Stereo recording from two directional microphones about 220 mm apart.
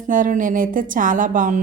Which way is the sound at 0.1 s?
35° right (ahead or behind).